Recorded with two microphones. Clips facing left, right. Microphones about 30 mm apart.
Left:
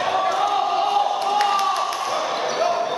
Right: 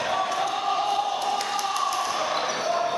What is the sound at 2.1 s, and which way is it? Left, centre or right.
Basketball bounce, centre.